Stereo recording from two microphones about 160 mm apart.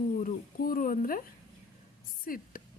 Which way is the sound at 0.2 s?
60° left (ahead or behind).